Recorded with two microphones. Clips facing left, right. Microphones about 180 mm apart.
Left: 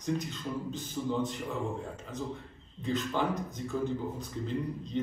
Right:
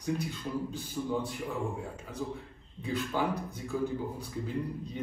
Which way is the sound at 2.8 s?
10° right (ahead or behind).